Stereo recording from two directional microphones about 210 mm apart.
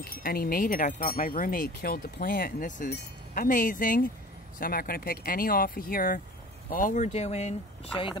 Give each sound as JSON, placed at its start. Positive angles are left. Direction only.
{"t": 0.0, "sound": "speech", "side_deg": 45}